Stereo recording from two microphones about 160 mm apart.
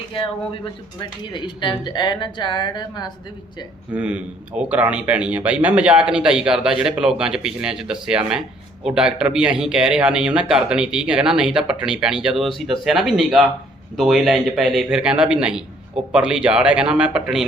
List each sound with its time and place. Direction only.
0.1 s speech: 35° left (ahead or behind)
3.9 s speech: 10° right (ahead or behind)